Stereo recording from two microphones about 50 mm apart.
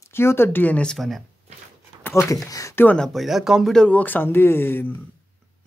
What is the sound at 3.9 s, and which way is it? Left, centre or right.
Speech, left.